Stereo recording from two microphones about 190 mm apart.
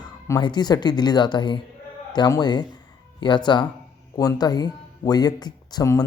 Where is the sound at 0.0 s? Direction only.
20° left (ahead or behind).